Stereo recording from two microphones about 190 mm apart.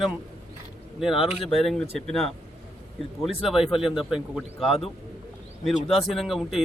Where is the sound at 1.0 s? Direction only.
Centre (ahead or behind).